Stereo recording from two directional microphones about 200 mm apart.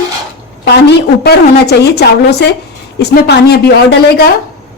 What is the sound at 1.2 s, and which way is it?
Speech, 55° left (ahead or behind).